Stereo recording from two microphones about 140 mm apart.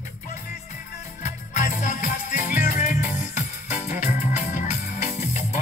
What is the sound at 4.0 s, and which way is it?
Music, 55° left (ahead or behind).